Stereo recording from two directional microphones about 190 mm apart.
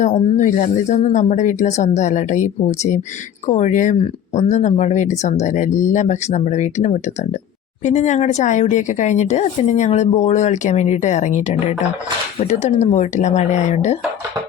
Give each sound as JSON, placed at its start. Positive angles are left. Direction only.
{"t": 0.0, "sound": "speech", "side_deg": 35}